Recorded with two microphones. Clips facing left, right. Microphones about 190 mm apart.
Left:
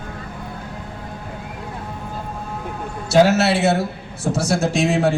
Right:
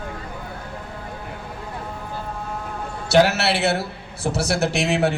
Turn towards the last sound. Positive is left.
turn(degrees=-65)  # may be behind; listen again after turning